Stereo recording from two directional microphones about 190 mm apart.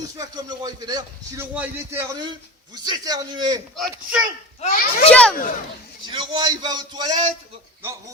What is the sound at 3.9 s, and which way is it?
Speech, 10° right (ahead or behind).